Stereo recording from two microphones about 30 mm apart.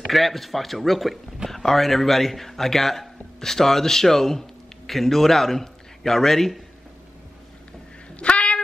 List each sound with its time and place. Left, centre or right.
0.1 s speech: centre
1.5 s a man's voice: centre
8.2 s a sound: left